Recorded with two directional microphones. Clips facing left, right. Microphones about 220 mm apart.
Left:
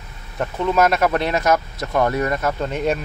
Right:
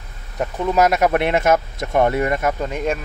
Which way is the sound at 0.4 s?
10° right (ahead or behind).